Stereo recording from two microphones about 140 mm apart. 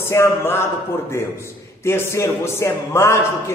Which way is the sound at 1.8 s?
20° left (ahead or behind).